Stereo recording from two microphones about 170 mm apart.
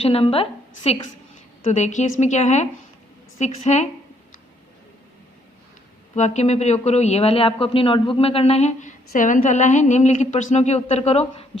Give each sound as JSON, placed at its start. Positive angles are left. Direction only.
{"t": 0.0, "sound": "speech", "side_deg": 35}
{"t": 1.7, "sound": "a woman's voice", "side_deg": 45}
{"t": 6.1, "sound": "speech", "side_deg": 45}